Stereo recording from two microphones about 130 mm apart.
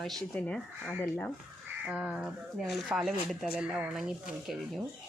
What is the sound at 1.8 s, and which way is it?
Speech, 5° right (ahead or behind).